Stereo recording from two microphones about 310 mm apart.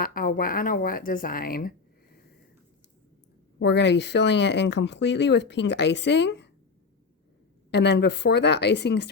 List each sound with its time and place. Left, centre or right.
0.0 s speech: left
3.6 s speech: left
7.7 s speech: left